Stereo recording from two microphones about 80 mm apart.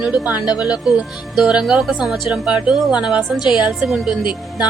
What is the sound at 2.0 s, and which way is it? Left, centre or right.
Speech, centre.